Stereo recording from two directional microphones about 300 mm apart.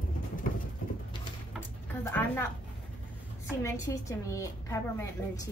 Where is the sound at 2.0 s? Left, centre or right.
Centre.